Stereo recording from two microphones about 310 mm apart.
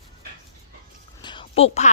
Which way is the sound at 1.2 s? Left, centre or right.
Centre.